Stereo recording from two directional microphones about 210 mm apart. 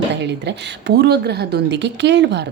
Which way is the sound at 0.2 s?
55° right (ahead or behind).